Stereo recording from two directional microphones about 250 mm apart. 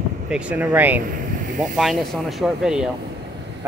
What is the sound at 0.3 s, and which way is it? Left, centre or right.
Speech, centre.